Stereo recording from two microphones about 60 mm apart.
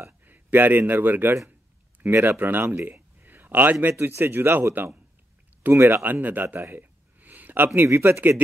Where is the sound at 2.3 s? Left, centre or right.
Right.